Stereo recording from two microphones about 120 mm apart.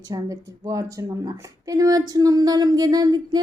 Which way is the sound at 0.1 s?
30° right (ahead or behind).